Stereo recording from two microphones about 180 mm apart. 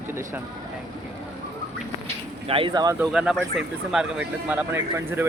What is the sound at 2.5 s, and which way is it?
Speech, 25° right (ahead or behind).